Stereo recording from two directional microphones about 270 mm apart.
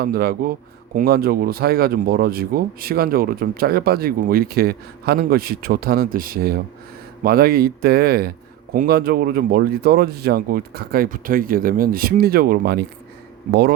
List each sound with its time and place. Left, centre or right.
0.0 s speech: right